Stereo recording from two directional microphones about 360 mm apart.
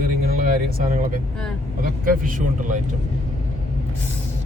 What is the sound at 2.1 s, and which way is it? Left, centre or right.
Speech, right.